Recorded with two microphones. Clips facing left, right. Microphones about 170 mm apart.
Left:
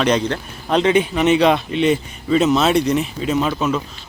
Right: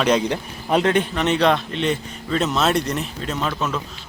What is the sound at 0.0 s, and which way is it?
Speech, 5° right (ahead or behind).